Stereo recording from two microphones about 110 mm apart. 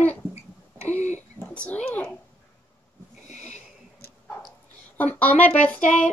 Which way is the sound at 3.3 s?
90° left.